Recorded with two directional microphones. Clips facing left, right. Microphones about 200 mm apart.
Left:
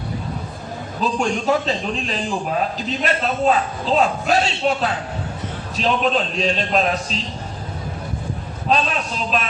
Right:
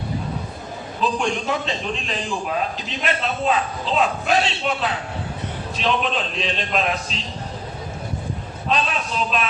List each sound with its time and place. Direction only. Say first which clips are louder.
1.0 s a man's voice: left 3 dB; 40° left (ahead or behind)
8.7 s a man's voice: left 2 dB; 40° left (ahead or behind)